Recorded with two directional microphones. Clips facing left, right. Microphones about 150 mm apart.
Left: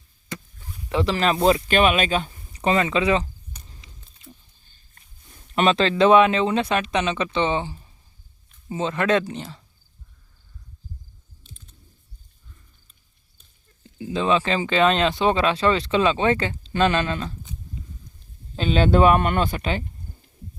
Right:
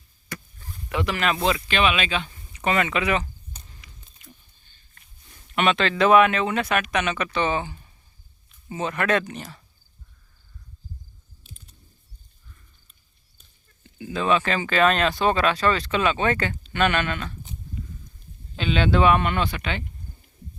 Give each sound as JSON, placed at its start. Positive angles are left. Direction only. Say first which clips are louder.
{"t": 0.3, "sound": "a sound", "louder": "left 2 dB", "side_deg": 20}
{"t": 0.9, "sound": "speech", "louder": "left 3 dB", "side_deg": 30}
{"t": 3.8, "sound": "a sound", "louder": "left 1 dB", "side_deg": 25}
{"t": 5.5, "sound": "speech", "louder": "left 3 dB", "side_deg": 30}
{"t": 14.0, "sound": "speech", "louder": "left 1 dB", "side_deg": 25}
{"t": 18.5, "sound": "speech", "louder": "left 3 dB", "side_deg": 40}